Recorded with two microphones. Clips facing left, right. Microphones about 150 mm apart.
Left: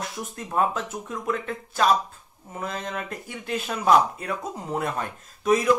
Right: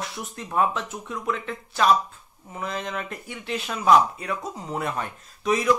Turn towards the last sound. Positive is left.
turn(degrees=45)  # may be behind; listen again after turning